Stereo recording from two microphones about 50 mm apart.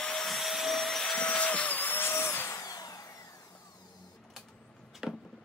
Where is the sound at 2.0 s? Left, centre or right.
Left.